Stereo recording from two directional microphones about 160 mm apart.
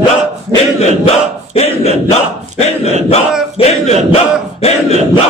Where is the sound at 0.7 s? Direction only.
40° left (ahead or behind).